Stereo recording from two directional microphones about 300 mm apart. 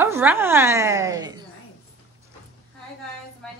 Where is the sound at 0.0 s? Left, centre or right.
Centre.